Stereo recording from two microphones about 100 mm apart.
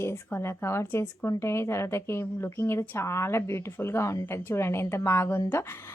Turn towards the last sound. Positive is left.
turn(degrees=25)  # may be behind; listen again after turning